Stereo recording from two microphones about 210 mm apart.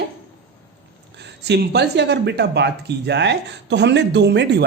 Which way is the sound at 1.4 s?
50° right (ahead or behind).